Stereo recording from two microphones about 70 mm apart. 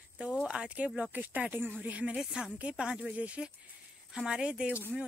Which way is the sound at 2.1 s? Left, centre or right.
Centre.